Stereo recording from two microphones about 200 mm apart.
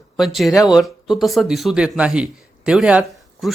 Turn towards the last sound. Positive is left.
turn(degrees=-5)  # may be behind; listen again after turning